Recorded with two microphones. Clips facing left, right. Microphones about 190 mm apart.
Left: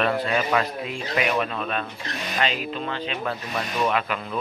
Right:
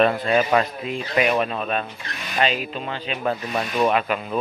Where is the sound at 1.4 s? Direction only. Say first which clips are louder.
Right 3 dB; 25° right (ahead or behind).